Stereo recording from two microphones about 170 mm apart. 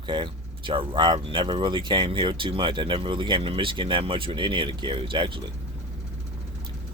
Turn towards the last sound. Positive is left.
turn(degrees=-30)  # may be behind; listen again after turning